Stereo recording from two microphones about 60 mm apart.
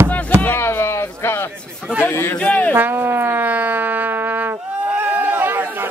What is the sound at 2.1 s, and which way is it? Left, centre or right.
Speech, left.